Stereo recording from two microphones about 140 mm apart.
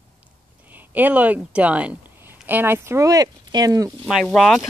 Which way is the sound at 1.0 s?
10° right (ahead or behind).